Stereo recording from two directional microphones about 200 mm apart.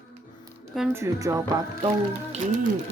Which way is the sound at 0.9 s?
15° right (ahead or behind).